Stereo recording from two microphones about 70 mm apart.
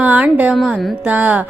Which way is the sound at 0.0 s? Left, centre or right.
Right.